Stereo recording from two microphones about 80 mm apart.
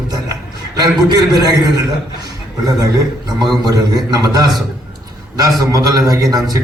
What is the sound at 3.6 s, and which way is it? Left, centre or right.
A man's voice, right.